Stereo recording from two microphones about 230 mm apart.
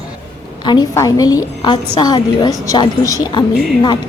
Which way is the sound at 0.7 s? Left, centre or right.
Centre.